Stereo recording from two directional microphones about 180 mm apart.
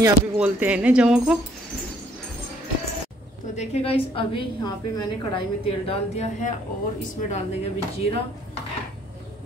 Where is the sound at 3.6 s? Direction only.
35° left (ahead or behind).